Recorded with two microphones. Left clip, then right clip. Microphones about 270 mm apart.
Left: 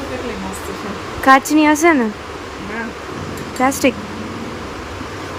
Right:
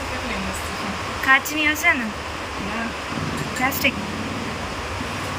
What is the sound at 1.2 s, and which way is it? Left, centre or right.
Speech, centre.